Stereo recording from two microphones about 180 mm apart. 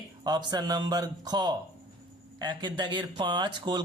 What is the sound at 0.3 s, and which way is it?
Speech, 25° right (ahead or behind).